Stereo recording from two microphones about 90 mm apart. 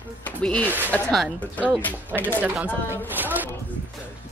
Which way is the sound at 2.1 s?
15° right (ahead or behind).